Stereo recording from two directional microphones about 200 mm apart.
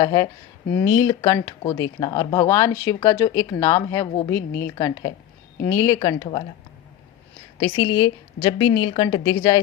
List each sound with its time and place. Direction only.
0.0 s a woman's voice: 20° left (ahead or behind)
7.6 s a woman's voice: 20° left (ahead or behind)